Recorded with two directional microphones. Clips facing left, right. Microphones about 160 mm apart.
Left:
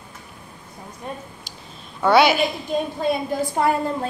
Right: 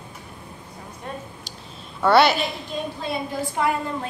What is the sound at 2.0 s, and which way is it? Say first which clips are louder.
Speech: left 1 dB; centre (ahead or behind).